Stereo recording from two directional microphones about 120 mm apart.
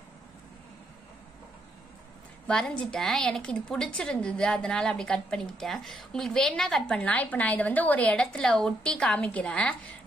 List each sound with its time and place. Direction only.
2.4 s a woman's voice: 5° left (ahead or behind)